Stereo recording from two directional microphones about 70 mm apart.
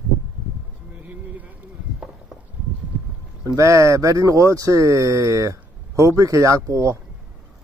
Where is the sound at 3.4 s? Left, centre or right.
Right.